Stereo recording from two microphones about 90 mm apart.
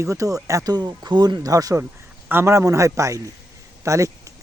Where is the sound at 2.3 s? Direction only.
25° right (ahead or behind).